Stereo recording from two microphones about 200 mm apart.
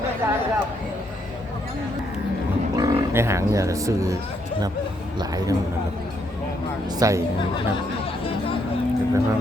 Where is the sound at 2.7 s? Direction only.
15° right (ahead or behind).